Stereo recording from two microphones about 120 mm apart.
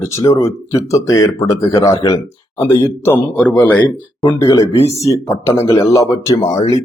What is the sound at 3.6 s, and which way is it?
Speech, 10° left (ahead or behind).